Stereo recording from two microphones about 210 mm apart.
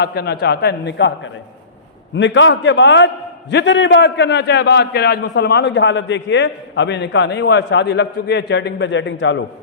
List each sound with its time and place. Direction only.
0.0 s a man's voice: 50° left (ahead or behind)